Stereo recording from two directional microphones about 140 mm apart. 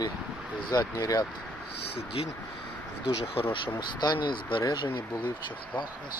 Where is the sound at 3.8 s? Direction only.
30° left (ahead or behind).